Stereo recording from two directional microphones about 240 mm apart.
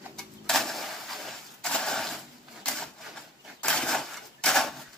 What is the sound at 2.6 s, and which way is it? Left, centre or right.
Printer, centre.